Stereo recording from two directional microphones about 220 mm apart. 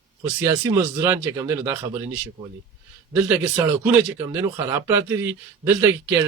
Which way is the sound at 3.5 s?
15° right (ahead or behind).